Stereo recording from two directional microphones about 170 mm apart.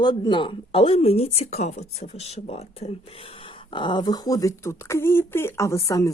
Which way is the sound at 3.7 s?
25° left (ahead or behind).